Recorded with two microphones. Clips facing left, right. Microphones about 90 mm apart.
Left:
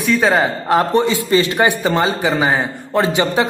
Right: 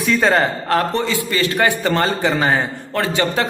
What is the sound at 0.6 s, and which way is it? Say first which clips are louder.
A man's voice: left 4 dB; 20° left (ahead or behind).